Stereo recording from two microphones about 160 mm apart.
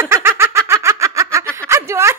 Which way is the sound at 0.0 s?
15° right (ahead or behind).